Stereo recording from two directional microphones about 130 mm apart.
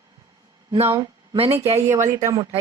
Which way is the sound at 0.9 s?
35° right (ahead or behind).